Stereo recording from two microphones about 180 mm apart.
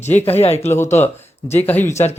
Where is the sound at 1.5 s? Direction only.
10° left (ahead or behind).